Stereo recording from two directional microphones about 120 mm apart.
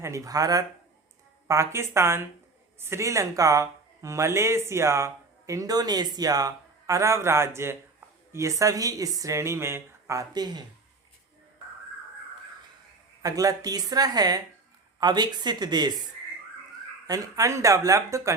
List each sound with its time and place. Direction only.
0.0 s speech: 25° right (ahead or behind)
13.2 s speech: 30° right (ahead or behind)
17.1 s speech: 30° right (ahead or behind)